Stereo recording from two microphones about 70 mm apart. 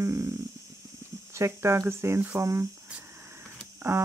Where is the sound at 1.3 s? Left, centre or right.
Right.